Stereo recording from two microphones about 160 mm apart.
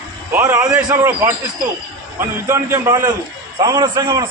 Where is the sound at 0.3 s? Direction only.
10° right (ahead or behind).